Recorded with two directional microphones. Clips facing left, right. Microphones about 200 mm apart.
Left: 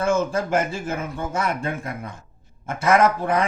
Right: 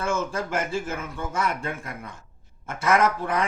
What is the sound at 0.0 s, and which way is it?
Speech, 15° left (ahead or behind).